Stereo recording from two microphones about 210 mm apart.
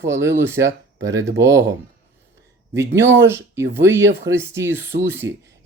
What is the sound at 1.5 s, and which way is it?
Speech, 60° right (ahead or behind).